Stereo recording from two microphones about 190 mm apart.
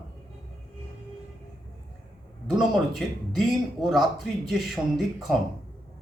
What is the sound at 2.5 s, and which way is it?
Speech, centre (ahead or behind).